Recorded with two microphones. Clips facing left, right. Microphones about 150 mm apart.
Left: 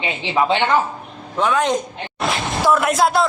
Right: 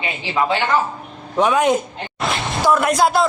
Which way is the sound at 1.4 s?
15° right (ahead or behind).